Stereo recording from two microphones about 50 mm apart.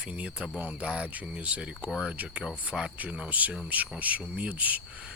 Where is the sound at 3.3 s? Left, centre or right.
Right.